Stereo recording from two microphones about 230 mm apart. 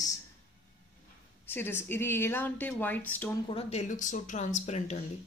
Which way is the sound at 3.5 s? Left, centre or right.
Left.